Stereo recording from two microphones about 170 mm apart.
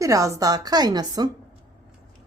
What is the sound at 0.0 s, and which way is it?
Speech, 20° right (ahead or behind).